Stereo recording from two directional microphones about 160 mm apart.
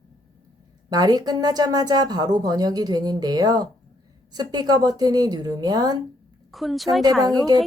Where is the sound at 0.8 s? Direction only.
25° right (ahead or behind).